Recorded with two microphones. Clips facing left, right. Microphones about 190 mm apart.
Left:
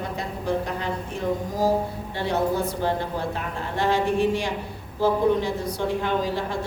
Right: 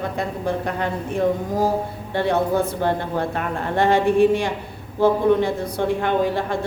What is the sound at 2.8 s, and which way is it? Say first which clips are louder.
A woman's voice: right 3 dB; 60° right (ahead or behind).